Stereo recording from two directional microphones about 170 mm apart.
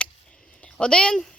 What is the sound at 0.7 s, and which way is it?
Speech, 5° left (ahead or behind).